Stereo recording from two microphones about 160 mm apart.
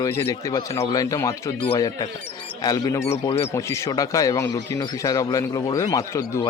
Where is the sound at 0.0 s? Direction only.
15° left (ahead or behind).